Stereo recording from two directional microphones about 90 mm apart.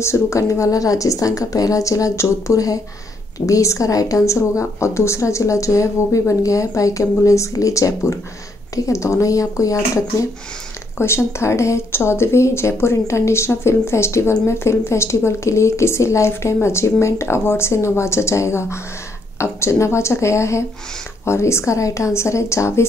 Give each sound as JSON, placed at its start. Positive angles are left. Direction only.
{"t": 0.0, "sound": "speech", "side_deg": 30}
{"t": 11.0, "sound": "speech", "side_deg": 30}